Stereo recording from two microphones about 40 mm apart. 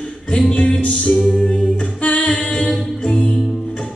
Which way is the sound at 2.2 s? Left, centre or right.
Centre.